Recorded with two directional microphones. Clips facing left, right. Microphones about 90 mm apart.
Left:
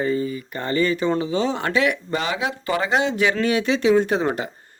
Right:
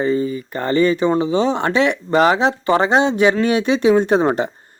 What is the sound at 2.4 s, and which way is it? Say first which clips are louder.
Speech: right 8 dB; 30° right (ahead or behind).